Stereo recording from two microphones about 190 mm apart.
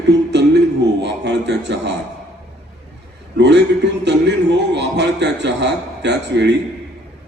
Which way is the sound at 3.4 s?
65° right (ahead or behind).